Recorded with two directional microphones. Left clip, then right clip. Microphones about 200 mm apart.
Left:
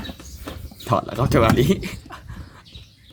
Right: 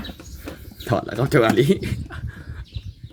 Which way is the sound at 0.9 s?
5° right (ahead or behind).